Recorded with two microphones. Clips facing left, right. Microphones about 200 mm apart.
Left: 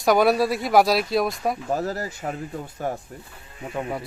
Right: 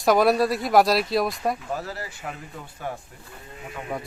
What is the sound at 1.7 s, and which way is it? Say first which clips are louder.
Speech: left 6 dB; 45° left (ahead or behind).